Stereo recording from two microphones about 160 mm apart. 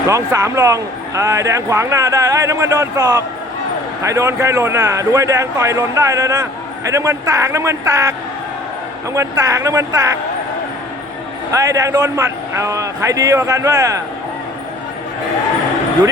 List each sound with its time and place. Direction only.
0.1 s a man's voice: 20° right (ahead or behind)
9.1 s a man's voice: 20° right (ahead or behind)
11.5 s a man's voice: 20° right (ahead or behind)